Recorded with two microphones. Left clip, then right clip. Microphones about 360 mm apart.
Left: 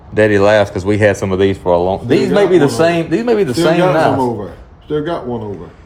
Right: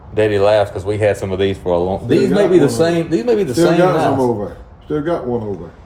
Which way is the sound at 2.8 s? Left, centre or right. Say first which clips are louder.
Left 2 dB; centre.